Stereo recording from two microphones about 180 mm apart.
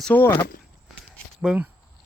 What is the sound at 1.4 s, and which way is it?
Speech, 5° right (ahead or behind).